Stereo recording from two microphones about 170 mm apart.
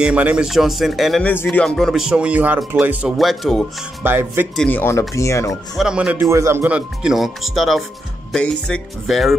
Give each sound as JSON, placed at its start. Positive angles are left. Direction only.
{"t": 0.0, "sound": "speech", "side_deg": -5}
{"t": 4.0, "sound": "speech", "side_deg": -10}
{"t": 4.6, "sound": "speech", "side_deg": 10}
{"t": 5.5, "sound": "speech", "side_deg": -5}